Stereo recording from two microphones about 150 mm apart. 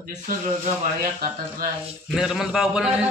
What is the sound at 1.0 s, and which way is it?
Speech, 70° right (ahead or behind).